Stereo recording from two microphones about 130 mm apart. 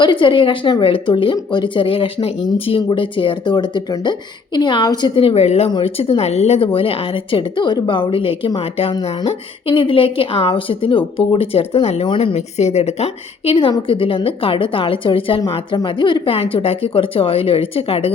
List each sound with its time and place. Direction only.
0.0 s speech: 40° left (ahead or behind)
5.1 s speech: 45° left (ahead or behind)
15.4 s speech: 30° left (ahead or behind); by 18.1 s 45° left (ahead or behind)